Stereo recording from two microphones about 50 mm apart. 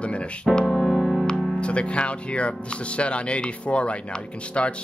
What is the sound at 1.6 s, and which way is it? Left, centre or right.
Speech, left.